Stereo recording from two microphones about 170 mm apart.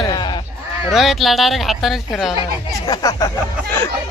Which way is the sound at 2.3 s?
30° left (ahead or behind).